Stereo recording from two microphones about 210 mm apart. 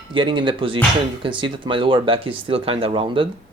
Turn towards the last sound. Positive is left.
turn(degrees=-25)  # may be behind; listen again after turning